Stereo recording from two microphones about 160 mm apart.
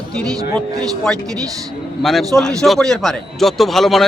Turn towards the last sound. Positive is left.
turn(degrees=0)  # may be behind; listen again after turning